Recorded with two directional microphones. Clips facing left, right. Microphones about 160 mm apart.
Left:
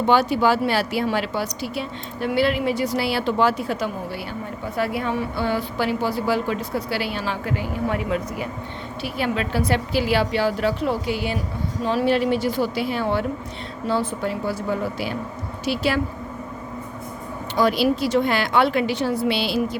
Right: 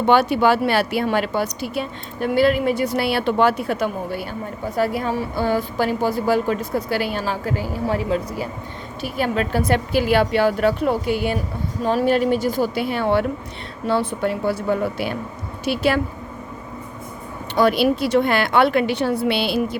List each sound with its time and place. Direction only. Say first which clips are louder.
0.1 s speech: right 3 dB; 60° right (ahead or behind)
4.7 s speech: right 3 dB; 40° right (ahead or behind)
9.0 s speech: right 3 dB; 45° right (ahead or behind)
17.5 s speech: right 2 dB; 60° right (ahead or behind)